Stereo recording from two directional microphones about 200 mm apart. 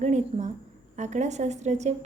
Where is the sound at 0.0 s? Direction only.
35° right (ahead or behind).